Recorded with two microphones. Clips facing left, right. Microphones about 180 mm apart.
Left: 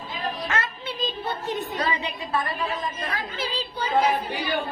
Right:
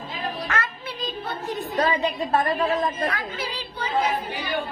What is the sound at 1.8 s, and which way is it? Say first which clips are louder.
A woman's voice: right 5 dB; 45° right (ahead or behind).